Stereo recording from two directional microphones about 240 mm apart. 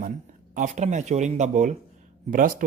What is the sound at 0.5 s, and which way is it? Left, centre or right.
Speech, right.